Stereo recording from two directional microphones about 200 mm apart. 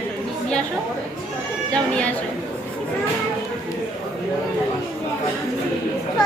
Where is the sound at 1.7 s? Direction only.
5° left (ahead or behind).